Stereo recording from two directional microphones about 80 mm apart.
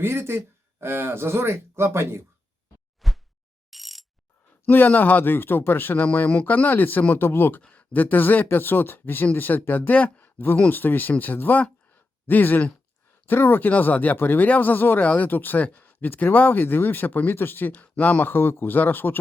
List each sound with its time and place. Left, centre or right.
0.0 s speech: right
3.0 s a sound: centre
3.7 s ratchet: centre
4.6 s speech: left